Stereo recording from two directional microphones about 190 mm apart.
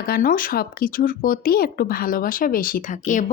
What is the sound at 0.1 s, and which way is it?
Speech, 45° left (ahead or behind).